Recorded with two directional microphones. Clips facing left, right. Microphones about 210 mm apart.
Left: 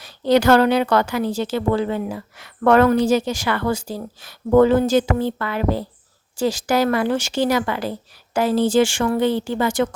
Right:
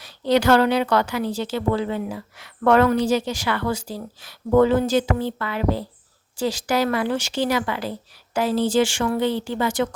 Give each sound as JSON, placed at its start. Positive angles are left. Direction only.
{"t": 0.0, "sound": "a woman's voice", "side_deg": 45}